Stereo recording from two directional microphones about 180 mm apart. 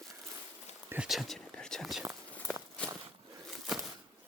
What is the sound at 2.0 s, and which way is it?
Walk, 10° right (ahead or behind).